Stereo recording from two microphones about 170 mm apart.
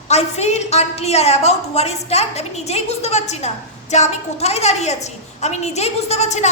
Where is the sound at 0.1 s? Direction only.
40° left (ahead or behind).